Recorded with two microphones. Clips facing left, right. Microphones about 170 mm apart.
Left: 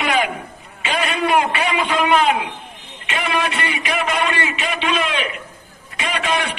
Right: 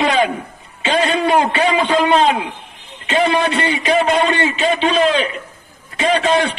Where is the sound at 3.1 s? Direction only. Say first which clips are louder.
Right 7 dB; 30° right (ahead or behind).